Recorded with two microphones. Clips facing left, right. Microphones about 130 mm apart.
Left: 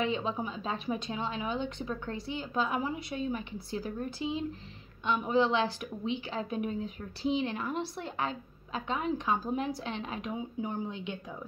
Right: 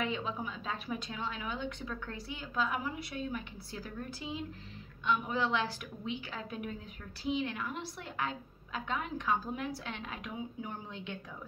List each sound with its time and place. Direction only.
0.0 s a woman's voice: 25° left (ahead or behind)